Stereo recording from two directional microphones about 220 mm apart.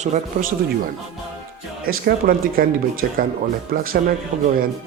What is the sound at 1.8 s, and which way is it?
Speech, 40° right (ahead or behind).